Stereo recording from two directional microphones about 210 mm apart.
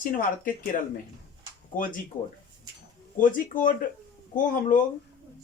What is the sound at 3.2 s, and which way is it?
Speech, 40° left (ahead or behind).